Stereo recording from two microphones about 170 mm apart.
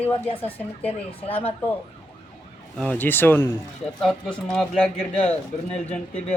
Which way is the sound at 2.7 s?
5° left (ahead or behind).